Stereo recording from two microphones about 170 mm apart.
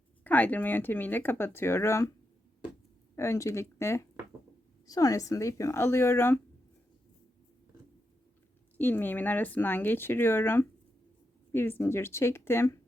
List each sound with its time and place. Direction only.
0.3 s speech: 10° left (ahead or behind)
3.2 s speech: 15° left (ahead or behind)
8.8 s speech: 10° left (ahead or behind)